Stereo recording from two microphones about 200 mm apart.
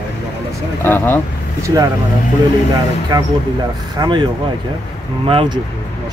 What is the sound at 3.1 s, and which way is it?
Speech, 20° right (ahead or behind).